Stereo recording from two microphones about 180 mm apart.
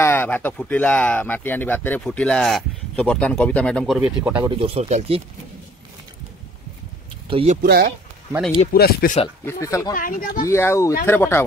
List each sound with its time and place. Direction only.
0.0 s speech: 10° left (ahead or behind); by 4.5 s 5° right (ahead or behind)
4.5 s speech: 30° right (ahead or behind)
7.2 s speech: 30° right (ahead or behind)
7.6 s speech: 55° right (ahead or behind)
8.7 s speech: 60° left (ahead or behind)
9.4 s speech: 15° left (ahead or behind)
9.9 s speech: 50° left (ahead or behind)
10.5 s speech: 15° left (ahead or behind)